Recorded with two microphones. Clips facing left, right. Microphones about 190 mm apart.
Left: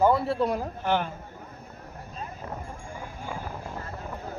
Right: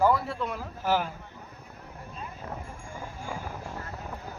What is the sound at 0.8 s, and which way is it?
Speech, 5° right (ahead or behind).